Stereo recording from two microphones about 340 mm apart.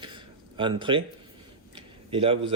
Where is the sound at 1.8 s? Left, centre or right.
Centre.